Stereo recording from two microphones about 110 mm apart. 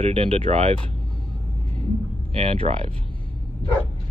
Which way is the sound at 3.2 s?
50° left (ahead or behind).